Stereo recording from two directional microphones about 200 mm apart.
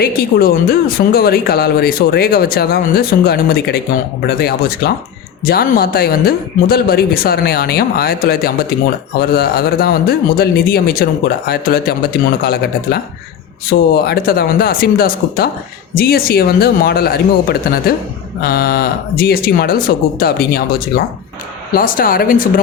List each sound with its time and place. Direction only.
0.0 s speech: 50° left (ahead or behind)